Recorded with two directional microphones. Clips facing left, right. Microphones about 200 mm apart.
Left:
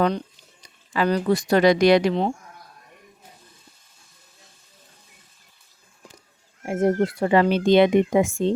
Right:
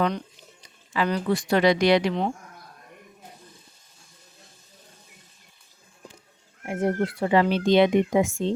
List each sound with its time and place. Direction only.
0.9 s speech: 40° left (ahead or behind)
6.7 s speech: 45° left (ahead or behind)